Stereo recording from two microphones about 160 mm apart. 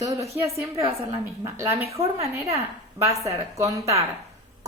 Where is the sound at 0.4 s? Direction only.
20° right (ahead or behind).